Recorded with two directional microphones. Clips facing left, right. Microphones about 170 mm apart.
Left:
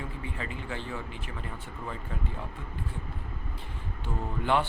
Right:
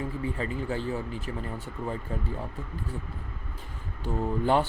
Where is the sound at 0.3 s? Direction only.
40° right (ahead or behind).